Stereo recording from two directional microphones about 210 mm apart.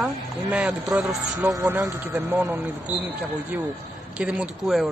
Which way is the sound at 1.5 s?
15° right (ahead or behind).